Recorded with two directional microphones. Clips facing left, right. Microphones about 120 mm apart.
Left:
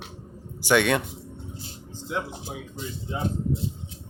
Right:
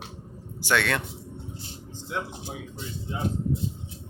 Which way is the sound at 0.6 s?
15° left (ahead or behind).